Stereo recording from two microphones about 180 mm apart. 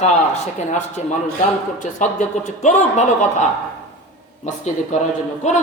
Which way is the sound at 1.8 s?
45° left (ahead or behind).